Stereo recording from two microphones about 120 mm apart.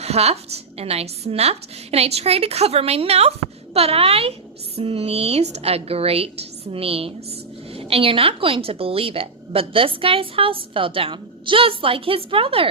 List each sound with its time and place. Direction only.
0.0 s a woman's voice: 60° right (ahead or behind)